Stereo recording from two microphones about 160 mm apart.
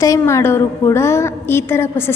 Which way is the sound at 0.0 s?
20° left (ahead or behind).